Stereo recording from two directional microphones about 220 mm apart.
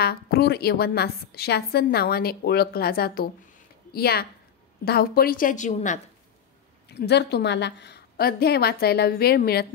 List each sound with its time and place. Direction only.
0.0 s a woman's voice: 45° left (ahead or behind)
6.9 s a woman's voice: 50° left (ahead or behind)